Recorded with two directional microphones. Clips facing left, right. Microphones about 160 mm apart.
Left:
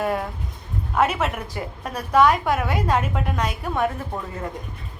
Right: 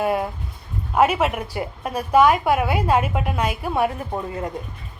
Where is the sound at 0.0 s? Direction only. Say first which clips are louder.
Right 3 dB; 10° right (ahead or behind).